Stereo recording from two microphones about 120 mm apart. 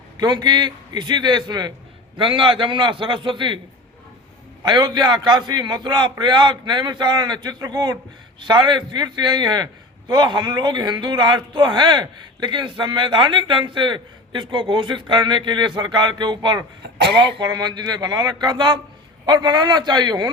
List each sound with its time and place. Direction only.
0.2 s a man's voice: 35° right (ahead or behind)
4.6 s speech: 35° right (ahead or behind)